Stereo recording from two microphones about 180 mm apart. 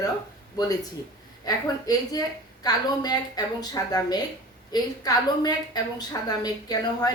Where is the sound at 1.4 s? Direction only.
20° left (ahead or behind).